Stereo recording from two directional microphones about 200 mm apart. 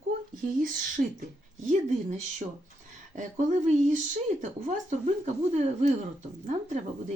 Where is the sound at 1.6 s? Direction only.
40° right (ahead or behind).